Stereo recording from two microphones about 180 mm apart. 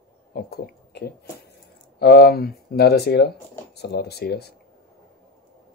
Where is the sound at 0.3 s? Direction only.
55° left (ahead or behind).